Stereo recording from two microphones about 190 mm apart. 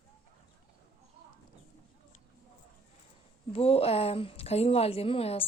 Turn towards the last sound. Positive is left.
turn(degrees=30)  # may be behind; listen again after turning